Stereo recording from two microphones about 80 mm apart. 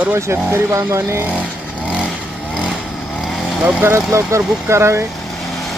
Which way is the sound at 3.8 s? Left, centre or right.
Right.